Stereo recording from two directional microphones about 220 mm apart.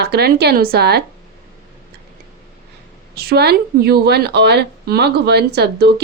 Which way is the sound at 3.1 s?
45° right (ahead or behind).